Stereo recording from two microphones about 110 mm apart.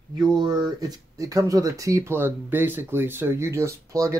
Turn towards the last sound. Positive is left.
turn(degrees=-30)  # may be behind; listen again after turning